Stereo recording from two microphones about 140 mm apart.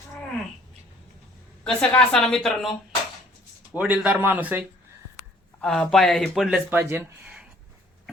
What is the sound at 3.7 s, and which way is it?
Speech, 10° right (ahead or behind).